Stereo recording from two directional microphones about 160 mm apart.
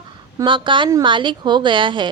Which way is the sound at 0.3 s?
30° right (ahead or behind).